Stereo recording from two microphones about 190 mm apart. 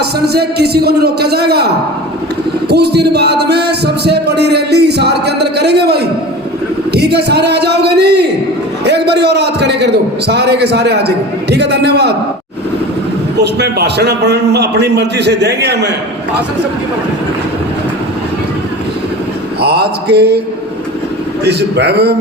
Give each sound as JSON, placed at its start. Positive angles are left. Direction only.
{"t": 0.0, "sound": "music", "side_deg": -60}
{"t": 13.4, "sound": "music", "side_deg": -60}
{"t": 19.5, "sound": "music", "side_deg": -60}
{"t": 21.4, "sound": "music", "side_deg": -60}